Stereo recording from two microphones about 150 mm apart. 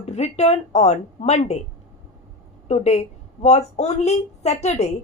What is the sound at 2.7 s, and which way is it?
A woman's voice, 45° left (ahead or behind).